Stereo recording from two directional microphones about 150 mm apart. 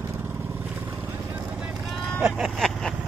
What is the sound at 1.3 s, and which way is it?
Clip-clop, 5° right (ahead or behind).